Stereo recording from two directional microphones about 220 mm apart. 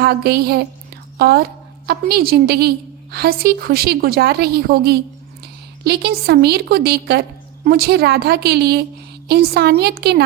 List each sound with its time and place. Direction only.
0.0 s a woman's voice: 45° right (ahead or behind)